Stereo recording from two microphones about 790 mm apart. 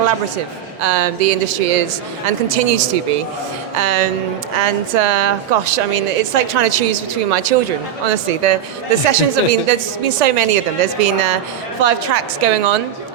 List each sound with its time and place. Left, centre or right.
0.8 s a woman's voice: right